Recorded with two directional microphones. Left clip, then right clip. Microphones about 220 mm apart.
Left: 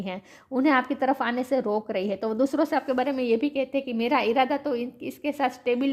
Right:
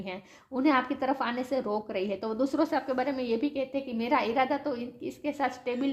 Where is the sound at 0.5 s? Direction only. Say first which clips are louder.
Left 4 dB; 40° left (ahead or behind).